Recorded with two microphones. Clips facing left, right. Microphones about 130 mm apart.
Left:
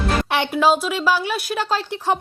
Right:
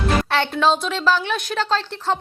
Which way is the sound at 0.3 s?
15° left (ahead or behind).